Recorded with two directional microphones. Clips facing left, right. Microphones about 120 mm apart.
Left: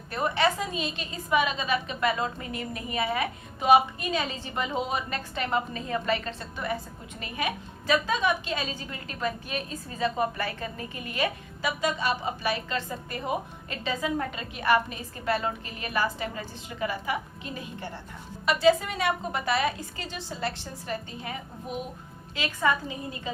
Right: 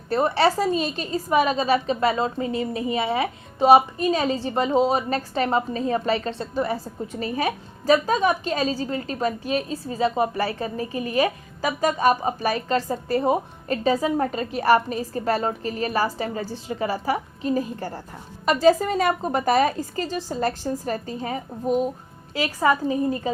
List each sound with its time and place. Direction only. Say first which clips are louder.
0.1 s a woman's voice: right 6 dB; 35° right (ahead or behind)